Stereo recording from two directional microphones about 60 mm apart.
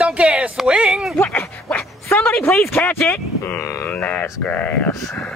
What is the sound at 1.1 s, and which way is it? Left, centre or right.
Dog, left.